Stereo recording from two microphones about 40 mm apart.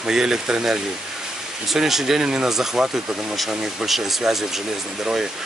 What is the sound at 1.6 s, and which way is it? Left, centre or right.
Speech, centre.